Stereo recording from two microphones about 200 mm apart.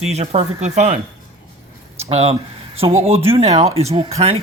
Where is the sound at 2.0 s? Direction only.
30° right (ahead or behind).